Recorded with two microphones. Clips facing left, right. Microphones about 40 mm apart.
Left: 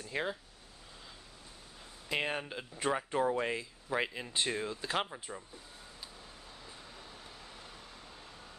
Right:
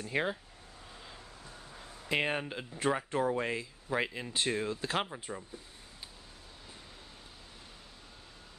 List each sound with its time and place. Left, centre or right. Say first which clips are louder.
0.0 s speech: right 3 dB; centre
2.0 s speech: right 3 dB; centre